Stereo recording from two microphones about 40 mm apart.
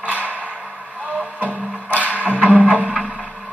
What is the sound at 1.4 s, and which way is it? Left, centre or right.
Music, right.